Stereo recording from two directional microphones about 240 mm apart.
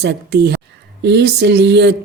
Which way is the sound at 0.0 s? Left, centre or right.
Right.